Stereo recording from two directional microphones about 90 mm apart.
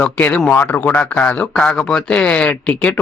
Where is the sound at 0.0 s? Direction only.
15° left (ahead or behind).